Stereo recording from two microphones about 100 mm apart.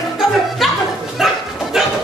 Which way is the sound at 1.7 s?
5° right (ahead or behind).